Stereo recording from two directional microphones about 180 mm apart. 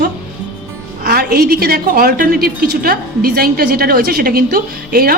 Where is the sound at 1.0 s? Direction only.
55° right (ahead or behind).